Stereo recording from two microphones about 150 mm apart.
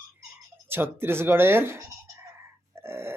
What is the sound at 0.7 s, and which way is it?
Speech, 15° right (ahead or behind).